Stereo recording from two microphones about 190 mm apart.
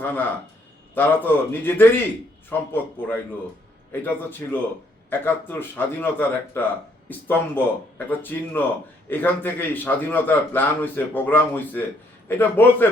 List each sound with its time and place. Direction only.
0.0 s a man's voice: 10° left (ahead or behind)